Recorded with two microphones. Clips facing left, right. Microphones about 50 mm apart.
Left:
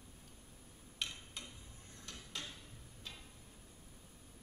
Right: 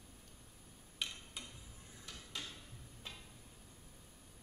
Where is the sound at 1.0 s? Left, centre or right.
Centre.